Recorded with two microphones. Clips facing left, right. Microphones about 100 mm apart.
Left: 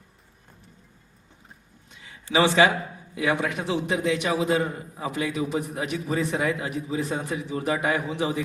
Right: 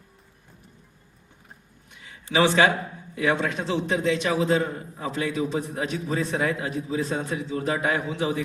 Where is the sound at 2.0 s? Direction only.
20° left (ahead or behind).